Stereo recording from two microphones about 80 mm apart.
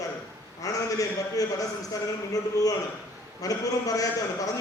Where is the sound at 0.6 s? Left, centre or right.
Left.